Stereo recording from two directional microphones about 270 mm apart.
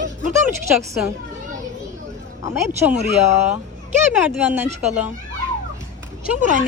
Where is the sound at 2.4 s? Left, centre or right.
Centre.